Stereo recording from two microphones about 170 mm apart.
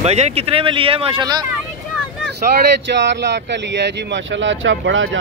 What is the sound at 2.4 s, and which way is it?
Speech, 55° right (ahead or behind).